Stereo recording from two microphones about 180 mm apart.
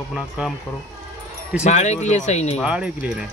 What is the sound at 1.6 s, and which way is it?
Speech, 40° left (ahead or behind).